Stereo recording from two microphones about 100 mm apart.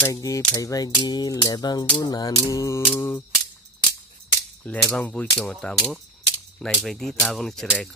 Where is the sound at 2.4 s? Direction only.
30° left (ahead or behind).